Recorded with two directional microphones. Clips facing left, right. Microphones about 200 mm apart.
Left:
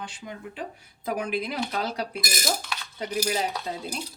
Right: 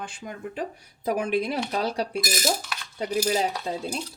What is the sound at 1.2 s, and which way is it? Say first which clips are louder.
Speech: right 3 dB; 30° right (ahead or behind).